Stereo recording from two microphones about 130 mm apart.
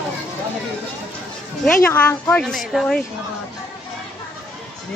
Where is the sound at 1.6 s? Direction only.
15° left (ahead or behind).